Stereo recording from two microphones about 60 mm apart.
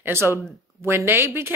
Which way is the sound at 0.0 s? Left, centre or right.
Right.